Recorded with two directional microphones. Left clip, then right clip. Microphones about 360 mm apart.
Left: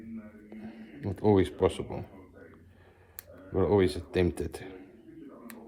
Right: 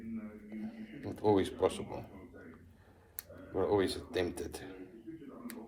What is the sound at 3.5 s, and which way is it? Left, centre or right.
Speech, left.